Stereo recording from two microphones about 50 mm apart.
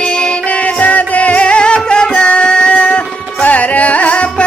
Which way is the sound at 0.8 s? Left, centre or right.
Left.